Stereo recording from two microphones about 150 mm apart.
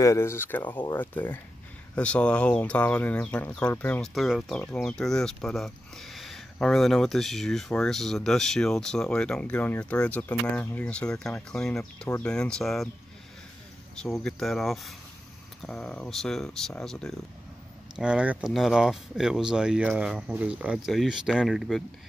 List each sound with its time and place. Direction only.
0.0 s speech: 20° left (ahead or behind); by 12.9 s centre (ahead or behind)
14.0 s speech: centre (ahead or behind)
17.9 s speech: 5° right (ahead or behind)